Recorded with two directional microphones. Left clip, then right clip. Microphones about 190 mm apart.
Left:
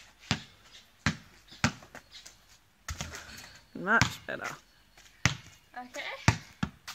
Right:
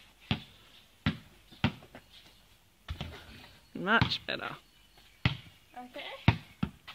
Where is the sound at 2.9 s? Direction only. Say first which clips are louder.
Left 4 dB; 25° left (ahead or behind).